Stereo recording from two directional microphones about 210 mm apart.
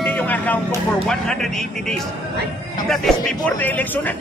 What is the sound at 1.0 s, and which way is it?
Speech, 5° left (ahead or behind).